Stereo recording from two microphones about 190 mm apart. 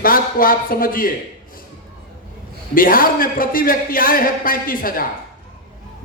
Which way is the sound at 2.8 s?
50° left (ahead or behind).